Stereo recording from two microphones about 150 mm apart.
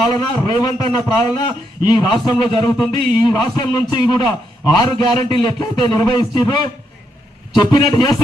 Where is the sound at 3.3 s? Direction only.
25° left (ahead or behind).